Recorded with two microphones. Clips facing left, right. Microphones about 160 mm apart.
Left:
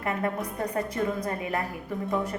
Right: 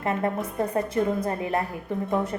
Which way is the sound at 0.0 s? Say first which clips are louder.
Right 3 dB; 25° right (ahead or behind).